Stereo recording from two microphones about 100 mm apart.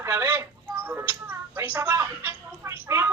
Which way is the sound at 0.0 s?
25° right (ahead or behind).